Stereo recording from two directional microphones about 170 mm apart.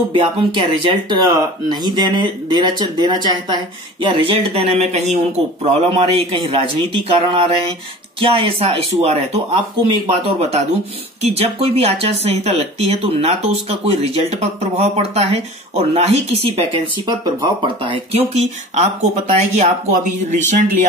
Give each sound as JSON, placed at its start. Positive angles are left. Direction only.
{"t": 0.1, "sound": "speech", "side_deg": -30}